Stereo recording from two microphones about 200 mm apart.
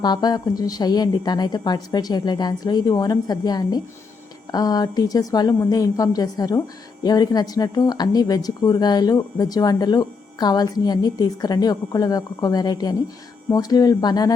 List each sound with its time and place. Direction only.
0.0 s speech: 20° left (ahead or behind)